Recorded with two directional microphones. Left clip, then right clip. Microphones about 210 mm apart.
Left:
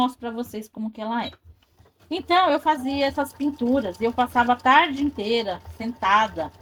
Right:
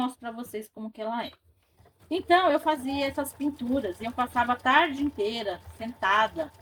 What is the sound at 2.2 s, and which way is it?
Speech, 35° left (ahead or behind).